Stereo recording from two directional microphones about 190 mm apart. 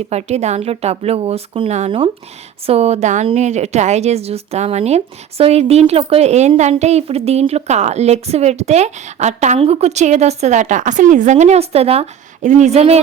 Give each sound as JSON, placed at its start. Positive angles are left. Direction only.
{"t": 0.1, "sound": "a woman's voice", "side_deg": -35}